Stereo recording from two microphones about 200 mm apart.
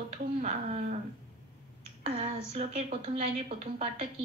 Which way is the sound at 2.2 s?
30° right (ahead or behind).